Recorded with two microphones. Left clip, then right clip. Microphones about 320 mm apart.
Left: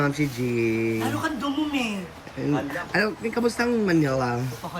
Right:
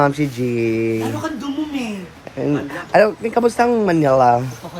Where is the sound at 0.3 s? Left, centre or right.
Right.